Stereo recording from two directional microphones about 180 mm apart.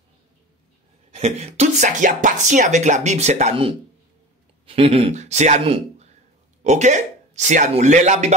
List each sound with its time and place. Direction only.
1.1 s speech: 35° right (ahead or behind)